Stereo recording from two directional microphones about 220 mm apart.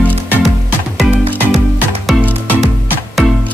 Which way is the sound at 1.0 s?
Centre (ahead or behind).